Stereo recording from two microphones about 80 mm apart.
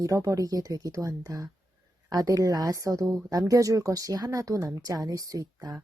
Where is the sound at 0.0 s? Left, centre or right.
Right.